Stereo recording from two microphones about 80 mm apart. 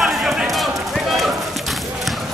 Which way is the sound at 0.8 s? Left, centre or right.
Centre.